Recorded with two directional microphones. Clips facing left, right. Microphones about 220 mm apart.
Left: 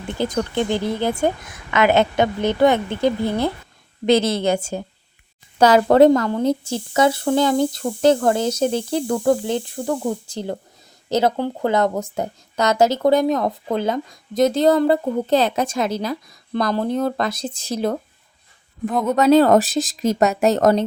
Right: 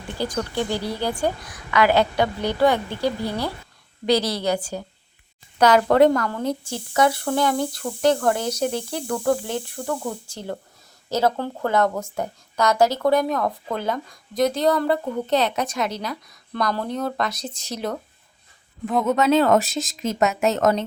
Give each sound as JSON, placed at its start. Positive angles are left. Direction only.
{"t": 0.2, "sound": "speech", "side_deg": 20}
{"t": 11.1, "sound": "speech", "side_deg": 20}
{"t": 19.1, "sound": "speech", "side_deg": 35}